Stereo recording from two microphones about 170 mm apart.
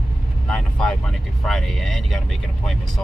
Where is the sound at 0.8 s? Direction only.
5° left (ahead or behind).